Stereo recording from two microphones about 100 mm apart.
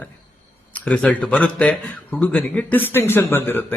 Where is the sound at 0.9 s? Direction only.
10° left (ahead or behind).